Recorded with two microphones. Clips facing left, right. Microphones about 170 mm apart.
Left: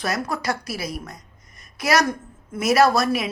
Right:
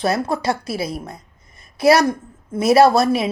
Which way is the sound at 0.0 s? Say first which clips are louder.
Right 6 dB; 25° right (ahead or behind).